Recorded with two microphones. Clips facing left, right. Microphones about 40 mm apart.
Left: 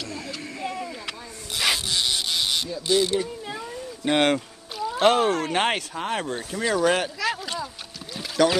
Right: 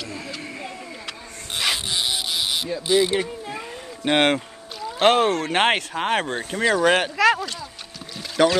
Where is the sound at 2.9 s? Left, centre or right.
Centre.